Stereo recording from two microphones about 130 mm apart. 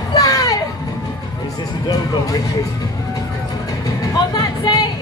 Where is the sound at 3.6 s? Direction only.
30° left (ahead or behind).